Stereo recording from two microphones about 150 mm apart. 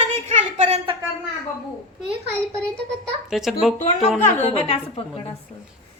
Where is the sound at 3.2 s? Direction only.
Centre (ahead or behind).